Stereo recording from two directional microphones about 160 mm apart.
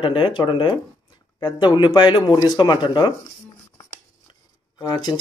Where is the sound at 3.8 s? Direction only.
25° left (ahead or behind).